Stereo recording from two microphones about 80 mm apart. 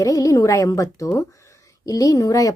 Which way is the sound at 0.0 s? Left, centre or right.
Left.